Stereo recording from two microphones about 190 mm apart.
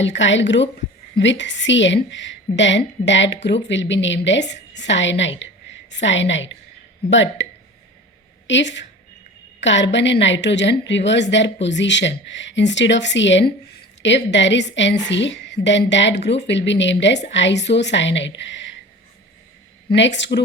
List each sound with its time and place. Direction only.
0.0 s a woman's voice: 75° left (ahead or behind)
8.4 s a woman's voice: 70° left (ahead or behind)
19.9 s a woman's voice: 70° left (ahead or behind)